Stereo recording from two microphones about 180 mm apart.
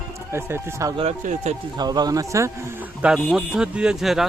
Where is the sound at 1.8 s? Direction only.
20° right (ahead or behind).